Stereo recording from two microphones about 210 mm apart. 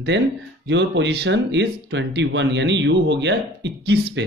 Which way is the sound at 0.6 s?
60° right (ahead or behind).